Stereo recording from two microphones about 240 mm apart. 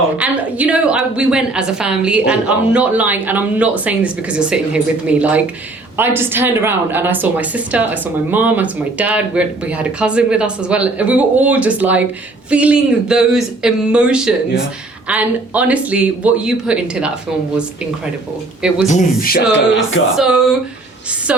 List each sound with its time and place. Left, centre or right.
0.2 s a woman's voice: centre
18.9 s speech: left
20.1 s a woman's voice: centre